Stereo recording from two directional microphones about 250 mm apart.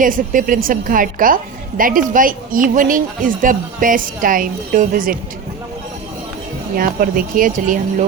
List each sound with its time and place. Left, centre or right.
0.0 s speech: right
6.7 s speech: right